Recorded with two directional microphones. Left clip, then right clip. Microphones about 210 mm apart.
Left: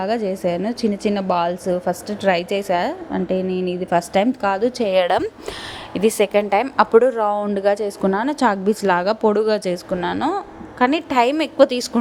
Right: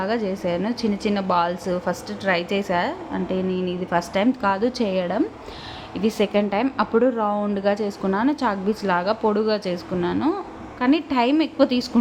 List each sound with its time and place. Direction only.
0.0 s a woman's voice: 20° left (ahead or behind)
4.9 s a woman's voice: 50° left (ahead or behind)
5.9 s speech: 35° left (ahead or behind)